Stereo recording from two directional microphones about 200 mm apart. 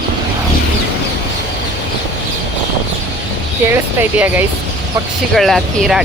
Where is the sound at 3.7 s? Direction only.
10° right (ahead or behind).